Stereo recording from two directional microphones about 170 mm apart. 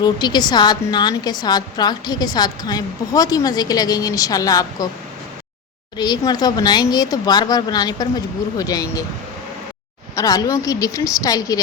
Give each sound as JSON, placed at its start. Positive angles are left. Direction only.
{"t": 0.0, "sound": "a woman's voice", "side_deg": 25}
{"t": 6.0, "sound": "a woman's voice", "side_deg": 25}
{"t": 10.2, "sound": "a woman's voice", "side_deg": 20}